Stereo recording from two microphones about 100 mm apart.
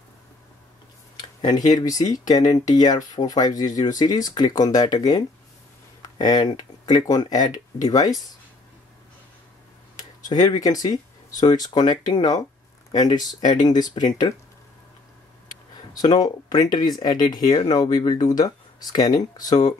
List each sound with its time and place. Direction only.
1.1 s speech: 45° left (ahead or behind)
10.3 s speech: 40° left (ahead or behind)
15.9 s speech: 45° left (ahead or behind)